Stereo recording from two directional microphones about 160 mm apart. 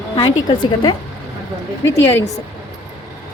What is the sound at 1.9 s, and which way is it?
Speech, 15° left (ahead or behind).